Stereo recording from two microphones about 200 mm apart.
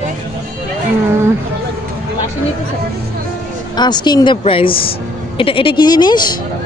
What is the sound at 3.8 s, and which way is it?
A woman's voice, 20° left (ahead or behind).